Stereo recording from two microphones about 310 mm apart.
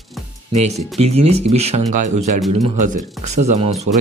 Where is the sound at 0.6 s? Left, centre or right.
Right.